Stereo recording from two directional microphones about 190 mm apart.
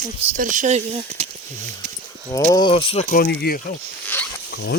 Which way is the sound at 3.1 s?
55° left (ahead or behind).